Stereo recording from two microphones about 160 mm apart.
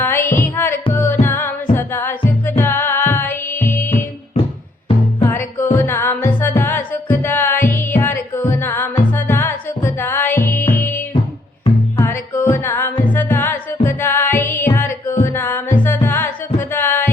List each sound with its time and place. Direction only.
0.0 s music: 15° left (ahead or behind)
5.2 s music: 15° left (ahead or behind)